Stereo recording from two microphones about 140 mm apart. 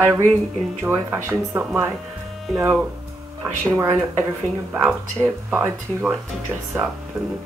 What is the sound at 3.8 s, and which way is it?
Speech, 15° right (ahead or behind).